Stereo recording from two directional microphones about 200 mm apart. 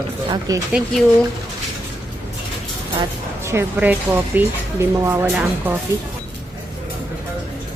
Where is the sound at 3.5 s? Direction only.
10° right (ahead or behind).